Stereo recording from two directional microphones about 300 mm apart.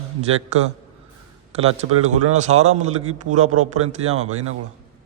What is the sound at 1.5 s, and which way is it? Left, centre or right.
A man's voice, right.